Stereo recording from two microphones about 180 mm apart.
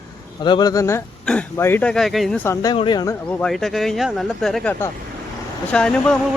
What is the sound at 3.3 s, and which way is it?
Speech, 5° left (ahead or behind).